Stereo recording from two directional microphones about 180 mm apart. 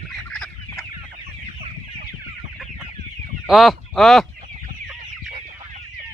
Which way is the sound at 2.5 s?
Centre (ahead or behind).